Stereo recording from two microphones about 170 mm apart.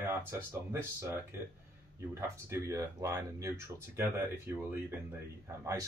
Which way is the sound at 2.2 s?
15° right (ahead or behind).